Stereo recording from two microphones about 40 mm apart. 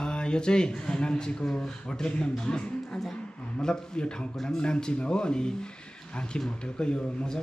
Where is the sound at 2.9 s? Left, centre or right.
Centre.